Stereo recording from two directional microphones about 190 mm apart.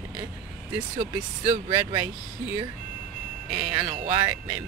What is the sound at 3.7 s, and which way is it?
Speech, 25° right (ahead or behind).